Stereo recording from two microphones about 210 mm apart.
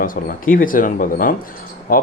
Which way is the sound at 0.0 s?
40° left (ahead or behind).